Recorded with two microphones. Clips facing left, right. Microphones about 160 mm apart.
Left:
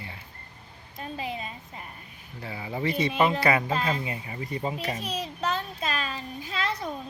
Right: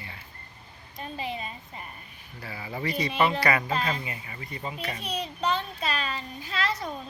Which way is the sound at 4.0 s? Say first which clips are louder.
Left 5 dB; 30° left (ahead or behind).